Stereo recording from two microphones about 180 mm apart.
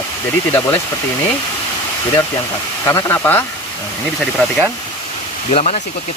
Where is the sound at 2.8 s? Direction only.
15° left (ahead or behind).